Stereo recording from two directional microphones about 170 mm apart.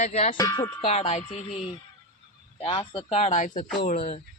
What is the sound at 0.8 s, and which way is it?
Speech, 40° left (ahead or behind).